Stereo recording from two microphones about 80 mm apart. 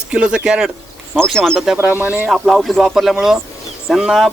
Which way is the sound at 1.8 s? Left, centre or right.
Right.